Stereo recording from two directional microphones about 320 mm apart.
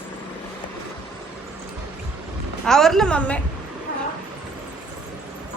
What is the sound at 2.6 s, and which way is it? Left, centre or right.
Speech, centre.